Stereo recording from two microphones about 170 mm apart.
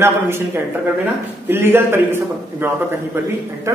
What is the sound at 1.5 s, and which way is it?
A man's voice, 15° right (ahead or behind).